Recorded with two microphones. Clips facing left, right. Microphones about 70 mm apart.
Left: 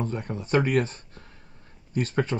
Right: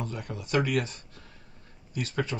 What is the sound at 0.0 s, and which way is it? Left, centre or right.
Speech, left.